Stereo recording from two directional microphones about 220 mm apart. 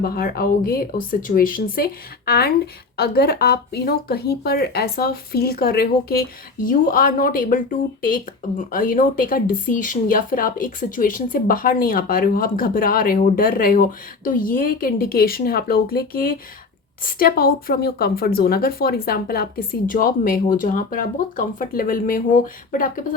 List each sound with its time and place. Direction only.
0.0 s speech: 40° left (ahead or behind)